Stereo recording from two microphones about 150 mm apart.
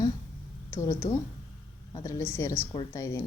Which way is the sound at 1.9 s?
20° left (ahead or behind).